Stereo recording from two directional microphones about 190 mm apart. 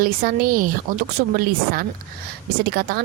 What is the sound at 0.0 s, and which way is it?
Speech, 50° right (ahead or behind).